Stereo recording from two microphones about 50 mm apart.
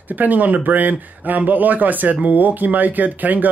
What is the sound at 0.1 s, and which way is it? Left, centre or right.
Speech, right.